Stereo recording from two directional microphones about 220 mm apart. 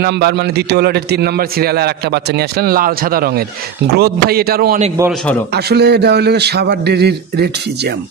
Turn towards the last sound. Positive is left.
turn(degrees=-45)  # may be behind; listen again after turning